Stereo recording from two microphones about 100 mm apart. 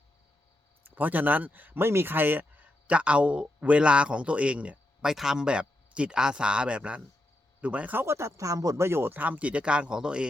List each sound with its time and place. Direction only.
0.9 s speech: 15° right (ahead or behind)
8.0 s speech: 30° right (ahead or behind); by 10.2 s 10° right (ahead or behind)